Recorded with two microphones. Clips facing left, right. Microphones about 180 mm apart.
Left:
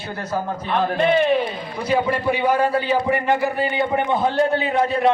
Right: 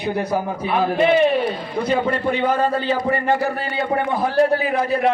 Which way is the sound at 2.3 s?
10° left (ahead or behind).